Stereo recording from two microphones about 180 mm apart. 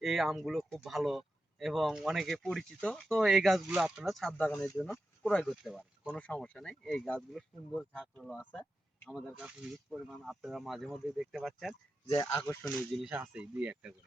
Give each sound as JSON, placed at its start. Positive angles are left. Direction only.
{"t": 0.0, "sound": "speech", "side_deg": 0}
{"t": 4.8, "sound": "speech", "side_deg": 5}
{"t": 9.9, "sound": "speech", "side_deg": 0}
{"t": 12.0, "sound": "speech", "side_deg": 20}
{"t": 12.6, "sound": "speech", "side_deg": 0}